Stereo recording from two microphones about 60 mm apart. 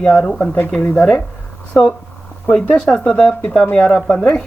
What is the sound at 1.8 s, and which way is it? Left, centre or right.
Speech, centre.